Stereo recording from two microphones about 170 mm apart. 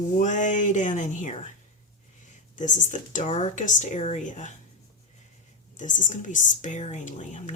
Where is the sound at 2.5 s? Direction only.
45° left (ahead or behind).